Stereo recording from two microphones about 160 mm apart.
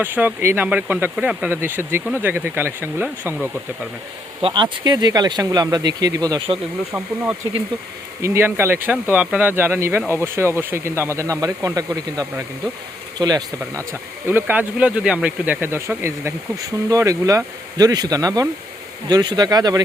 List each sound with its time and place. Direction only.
0.0 s speech: 10° right (ahead or behind)
4.4 s speech: 30° right (ahead or behind)
6.9 s speech: 10° right (ahead or behind)